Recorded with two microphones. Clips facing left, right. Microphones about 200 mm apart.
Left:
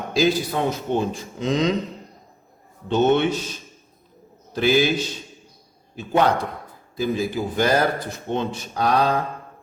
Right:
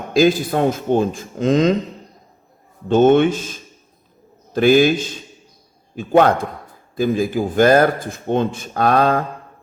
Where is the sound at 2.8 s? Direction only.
50° right (ahead or behind).